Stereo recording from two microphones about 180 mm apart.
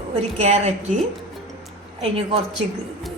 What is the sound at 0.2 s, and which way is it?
Speech, 40° right (ahead or behind).